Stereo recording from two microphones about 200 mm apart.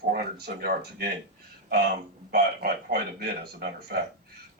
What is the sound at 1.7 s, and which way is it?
Speech, 55° right (ahead or behind).